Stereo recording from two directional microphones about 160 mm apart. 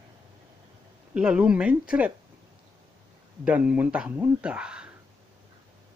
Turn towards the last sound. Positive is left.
turn(degrees=-5)  # may be behind; listen again after turning